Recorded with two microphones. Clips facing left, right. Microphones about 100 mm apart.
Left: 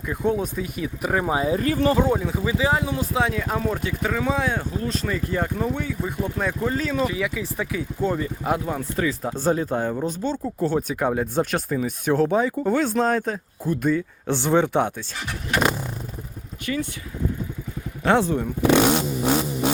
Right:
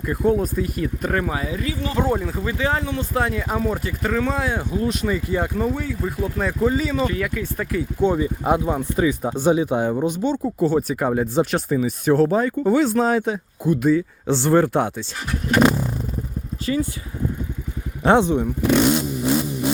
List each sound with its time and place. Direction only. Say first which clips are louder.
0.1 s speech: right 4 dB; centre (ahead or behind)
1.2 s speech: left 3 dB; 20° left (ahead or behind)
1.5 s speech: left 6 dB; 50° left (ahead or behind)
2.0 s speech: even; centre (ahead or behind)
8.4 s speech: right 4 dB; 20° right (ahead or behind)
18.0 s speech: right 3 dB; 25° right (ahead or behind)
18.7 s vehicle: even; 80° left